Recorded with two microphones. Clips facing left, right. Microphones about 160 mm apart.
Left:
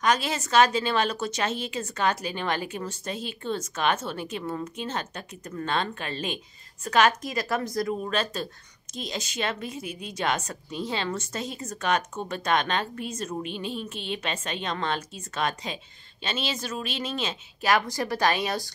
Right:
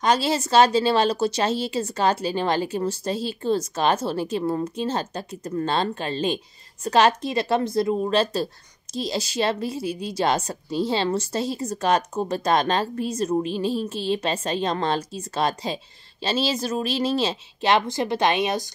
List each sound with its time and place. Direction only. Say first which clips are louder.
0.0 s a woman's voice: right 4 dB; 30° right (ahead or behind)